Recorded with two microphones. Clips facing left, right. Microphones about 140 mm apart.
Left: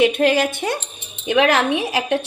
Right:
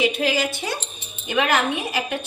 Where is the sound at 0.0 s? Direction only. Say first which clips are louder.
Left 6 dB; 55° left (ahead or behind).